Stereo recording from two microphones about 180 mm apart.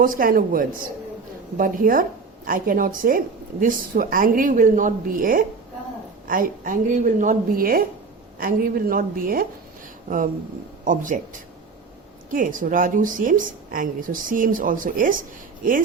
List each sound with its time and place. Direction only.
0.0 s a woman's voice: 50° right (ahead or behind)
10.8 s a woman's voice: 45° right (ahead or behind)
12.3 s a woman's voice: 50° right (ahead or behind)